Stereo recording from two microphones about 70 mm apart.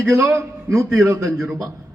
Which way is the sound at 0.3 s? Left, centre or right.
Right.